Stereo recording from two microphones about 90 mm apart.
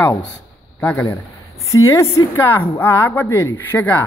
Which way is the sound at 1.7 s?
35° left (ahead or behind).